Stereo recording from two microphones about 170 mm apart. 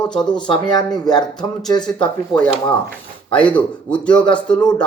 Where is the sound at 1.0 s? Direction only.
25° left (ahead or behind).